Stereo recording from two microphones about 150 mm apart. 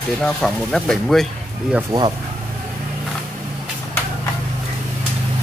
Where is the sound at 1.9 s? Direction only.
30° right (ahead or behind).